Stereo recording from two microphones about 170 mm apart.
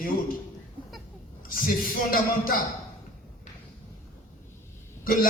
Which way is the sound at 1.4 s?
55° left (ahead or behind).